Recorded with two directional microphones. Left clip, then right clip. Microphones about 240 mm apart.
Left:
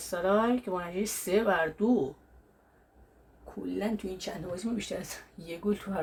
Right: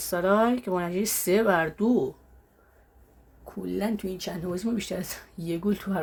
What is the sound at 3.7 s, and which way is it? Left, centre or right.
Speech, right.